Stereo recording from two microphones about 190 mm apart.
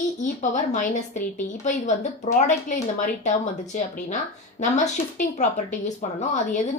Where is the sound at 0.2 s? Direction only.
40° left (ahead or behind).